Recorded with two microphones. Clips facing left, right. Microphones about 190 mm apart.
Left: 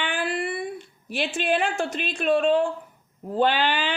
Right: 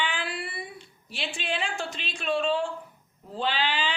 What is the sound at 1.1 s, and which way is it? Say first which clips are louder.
A woman's voice: left 9 dB; 55° left (ahead or behind).